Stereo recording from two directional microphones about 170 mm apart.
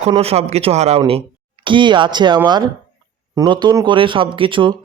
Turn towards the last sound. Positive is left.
turn(degrees=-30)  # may be behind; listen again after turning